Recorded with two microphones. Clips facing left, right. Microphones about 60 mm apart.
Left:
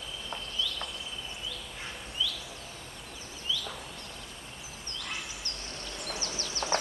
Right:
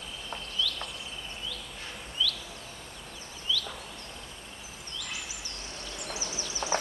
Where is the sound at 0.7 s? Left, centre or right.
Left.